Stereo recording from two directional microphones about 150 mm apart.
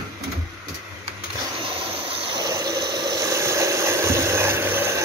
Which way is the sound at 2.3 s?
25° right (ahead or behind).